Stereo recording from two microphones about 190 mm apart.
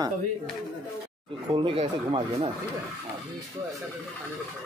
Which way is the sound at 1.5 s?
25° right (ahead or behind).